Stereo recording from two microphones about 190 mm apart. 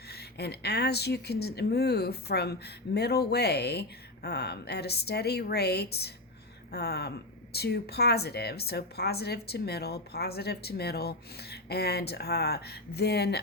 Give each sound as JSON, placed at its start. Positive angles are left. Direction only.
{"t": 0.1, "sound": "speech", "side_deg": 60}